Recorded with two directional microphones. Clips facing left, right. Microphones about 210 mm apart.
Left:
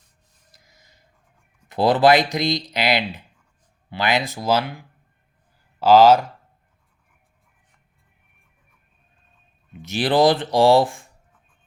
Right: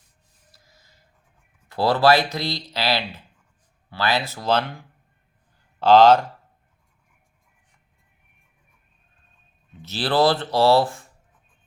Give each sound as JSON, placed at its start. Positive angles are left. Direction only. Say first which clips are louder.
{"t": 0.5, "sound": "a sound", "louder": "left 1 dB", "side_deg": 20}
{"t": 1.7, "sound": "speech", "louder": "left 2 dB", "side_deg": 20}
{"t": 5.8, "sound": "speech", "louder": "left 1 dB", "side_deg": 10}
{"t": 9.7, "sound": "speech", "louder": "left 3 dB", "side_deg": 15}